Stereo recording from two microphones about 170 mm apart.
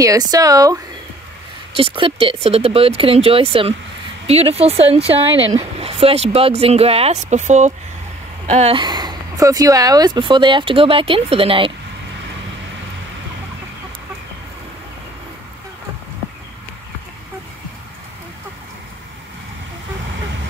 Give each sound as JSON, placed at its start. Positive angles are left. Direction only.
{"t": 0.0, "sound": "speech", "side_deg": -20}
{"t": 1.7, "sound": "a woman's voice", "side_deg": -35}
{"t": 8.8, "sound": "speech", "side_deg": -25}